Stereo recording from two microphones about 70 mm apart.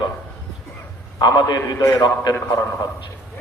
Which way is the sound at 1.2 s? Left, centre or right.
Left.